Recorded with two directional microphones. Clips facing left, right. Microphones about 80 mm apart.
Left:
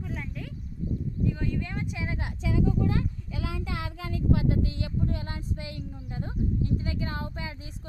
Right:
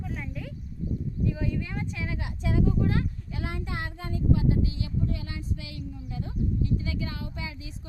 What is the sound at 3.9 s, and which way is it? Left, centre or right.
Child singing, left.